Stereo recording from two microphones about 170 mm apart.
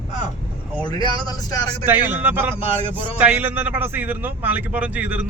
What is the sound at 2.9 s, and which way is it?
A man's voice, 10° right (ahead or behind).